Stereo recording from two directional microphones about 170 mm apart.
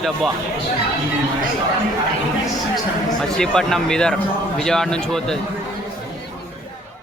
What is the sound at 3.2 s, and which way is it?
A man's voice, 5° left (ahead or behind).